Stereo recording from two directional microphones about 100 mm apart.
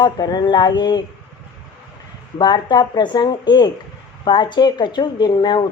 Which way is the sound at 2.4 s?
50° left (ahead or behind).